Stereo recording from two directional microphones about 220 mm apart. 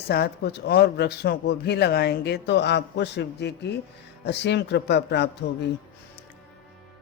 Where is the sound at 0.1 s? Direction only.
45° left (ahead or behind).